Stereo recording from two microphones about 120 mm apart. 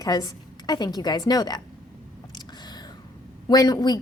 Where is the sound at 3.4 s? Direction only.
35° left (ahead or behind).